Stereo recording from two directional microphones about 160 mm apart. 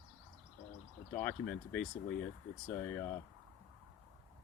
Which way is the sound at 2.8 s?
10° left (ahead or behind).